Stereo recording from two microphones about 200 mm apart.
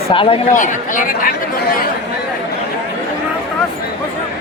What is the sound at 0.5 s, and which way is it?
Speech, 40° left (ahead or behind).